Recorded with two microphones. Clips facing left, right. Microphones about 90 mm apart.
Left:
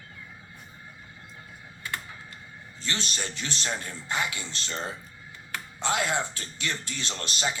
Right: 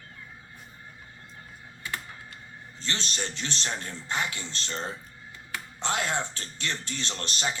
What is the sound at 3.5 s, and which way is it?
Speech, 10° left (ahead or behind).